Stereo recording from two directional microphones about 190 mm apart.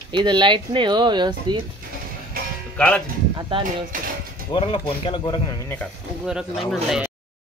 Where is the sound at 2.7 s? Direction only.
5° left (ahead or behind).